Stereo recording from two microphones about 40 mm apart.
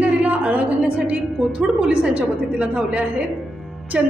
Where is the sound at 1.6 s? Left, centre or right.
Right.